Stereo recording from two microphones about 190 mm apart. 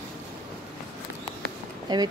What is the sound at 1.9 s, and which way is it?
Speech, 20° right (ahead or behind).